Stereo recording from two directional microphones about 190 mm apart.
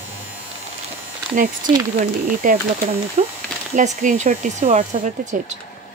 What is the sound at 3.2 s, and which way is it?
Speech, 35° right (ahead or behind).